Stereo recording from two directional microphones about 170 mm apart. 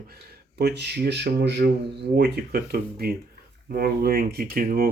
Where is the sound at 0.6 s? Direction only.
70° right (ahead or behind).